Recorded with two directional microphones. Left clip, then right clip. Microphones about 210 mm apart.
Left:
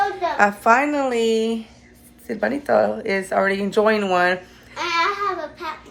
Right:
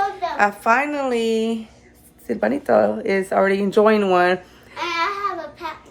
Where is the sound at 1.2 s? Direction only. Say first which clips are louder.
Left 1 dB; 30° right (ahead or behind).